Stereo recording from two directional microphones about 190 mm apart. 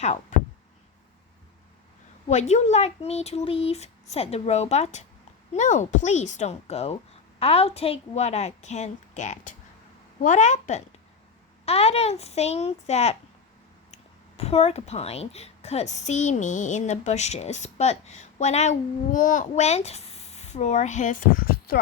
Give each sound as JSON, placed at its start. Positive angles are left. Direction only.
{"t": 0.0, "sound": "a woman's voice", "side_deg": 40}
{"t": 2.3, "sound": "a woman's voice", "side_deg": 35}